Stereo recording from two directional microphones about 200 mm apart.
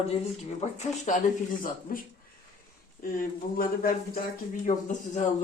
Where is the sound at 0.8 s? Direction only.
35° left (ahead or behind).